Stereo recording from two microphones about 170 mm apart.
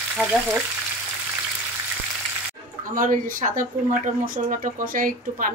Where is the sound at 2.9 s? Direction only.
50° right (ahead or behind).